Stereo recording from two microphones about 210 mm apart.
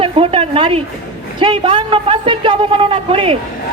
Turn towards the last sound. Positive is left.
turn(degrees=-25)  # may be behind; listen again after turning